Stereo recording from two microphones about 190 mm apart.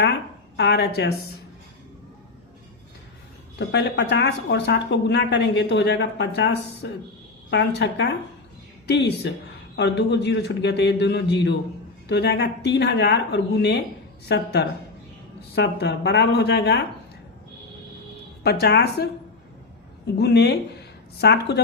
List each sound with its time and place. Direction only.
0.0 s a woman's voice: 60° left (ahead or behind)
3.6 s speech: 65° left (ahead or behind)
18.4 s speech: 55° left (ahead or behind)
20.1 s speech: 60° left (ahead or behind)